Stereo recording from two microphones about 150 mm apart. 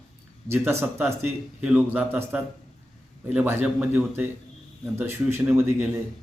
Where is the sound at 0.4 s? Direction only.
15° right (ahead or behind).